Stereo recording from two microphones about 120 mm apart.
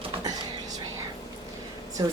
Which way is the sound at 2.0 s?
30° right (ahead or behind).